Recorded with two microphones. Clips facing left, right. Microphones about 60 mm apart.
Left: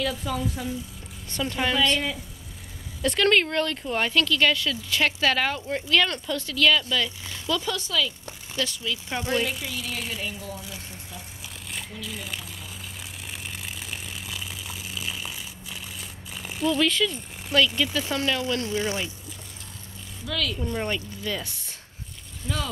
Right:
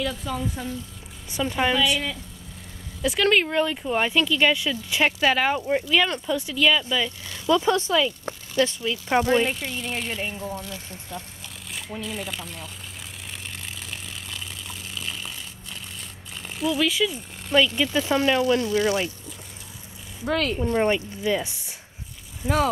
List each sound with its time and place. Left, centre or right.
0.0 s speech: centre
1.3 s speech: centre
3.0 s speech: centre
7.4 s a woman's voice: right
10.6 s speech: centre
13.3 s a sound: centre
17.9 s speech: right
18.7 s speech: left
20.2 s a woman's voice: right
20.6 s speech: right